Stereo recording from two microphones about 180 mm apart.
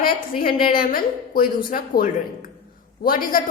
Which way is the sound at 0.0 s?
55° left (ahead or behind).